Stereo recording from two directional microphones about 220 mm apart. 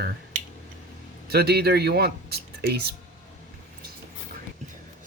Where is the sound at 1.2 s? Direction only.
45° right (ahead or behind).